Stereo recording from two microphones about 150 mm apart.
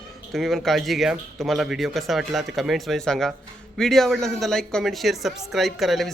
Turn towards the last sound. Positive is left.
turn(degrees=0)  # may be behind; listen again after turning